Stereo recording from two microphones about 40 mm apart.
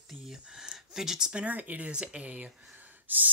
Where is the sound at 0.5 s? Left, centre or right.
Centre.